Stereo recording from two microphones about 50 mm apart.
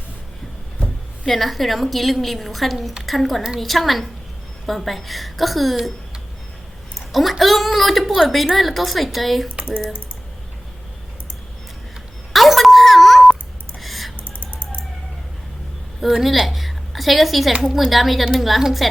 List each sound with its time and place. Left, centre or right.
1.2 s a woman's voice: centre
7.1 s a woman's voice: centre
12.3 s a sound: centre
14.3 s music: left
16.2 s a woman's voice: centre